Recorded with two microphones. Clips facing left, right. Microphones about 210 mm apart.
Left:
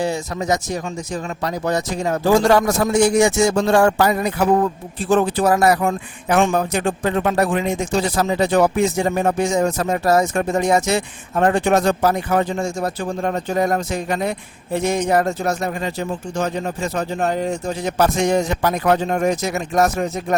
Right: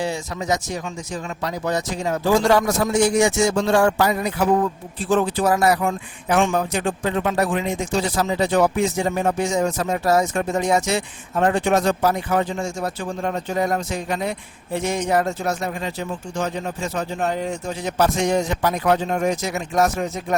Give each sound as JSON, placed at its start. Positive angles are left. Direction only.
{"t": 0.0, "sound": "speech", "side_deg": 45}